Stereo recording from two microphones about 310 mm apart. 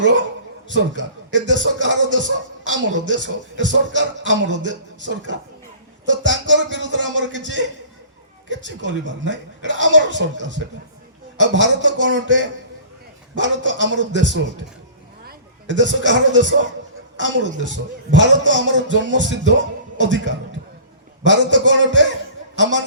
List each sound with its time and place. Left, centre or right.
0.0 s a man's voice: right
15.3 s a man's voice: right